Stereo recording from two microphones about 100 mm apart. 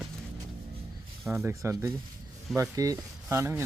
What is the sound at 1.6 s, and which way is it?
Speech, 25° right (ahead or behind).